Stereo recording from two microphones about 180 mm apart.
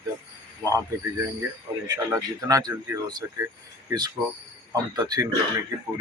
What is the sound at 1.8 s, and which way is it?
Speech, 20° right (ahead or behind).